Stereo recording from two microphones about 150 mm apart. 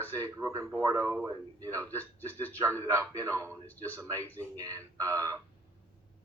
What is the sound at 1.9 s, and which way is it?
Speech, 10° left (ahead or behind).